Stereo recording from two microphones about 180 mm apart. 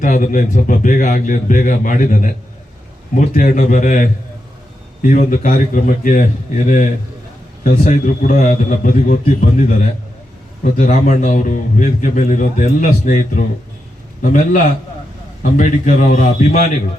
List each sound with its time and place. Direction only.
0.0 s a man's voice: 45° left (ahead or behind)
7.6 s a man's voice: 45° left (ahead or behind)